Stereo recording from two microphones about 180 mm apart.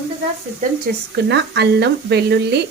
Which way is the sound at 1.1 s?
70° right (ahead or behind).